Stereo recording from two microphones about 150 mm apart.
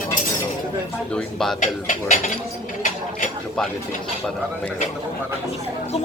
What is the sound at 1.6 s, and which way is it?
Speech, 55° left (ahead or behind).